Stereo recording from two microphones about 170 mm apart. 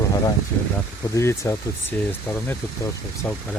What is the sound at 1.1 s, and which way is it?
Speech, 15° left (ahead or behind).